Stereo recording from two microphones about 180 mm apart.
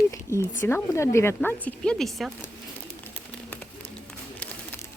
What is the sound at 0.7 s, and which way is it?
Speech, 15° left (ahead or behind).